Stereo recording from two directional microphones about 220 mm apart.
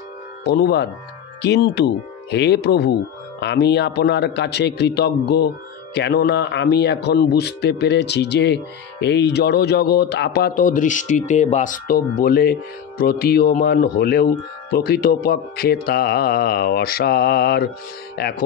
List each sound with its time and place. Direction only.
0.5 s a man's voice: 50° left (ahead or behind)